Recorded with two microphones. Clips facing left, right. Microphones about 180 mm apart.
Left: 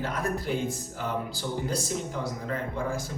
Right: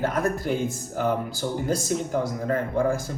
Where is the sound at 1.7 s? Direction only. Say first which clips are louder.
Right 6 dB; 50° right (ahead or behind).